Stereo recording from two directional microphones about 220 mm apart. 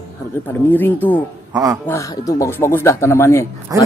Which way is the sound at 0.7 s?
10° left (ahead or behind).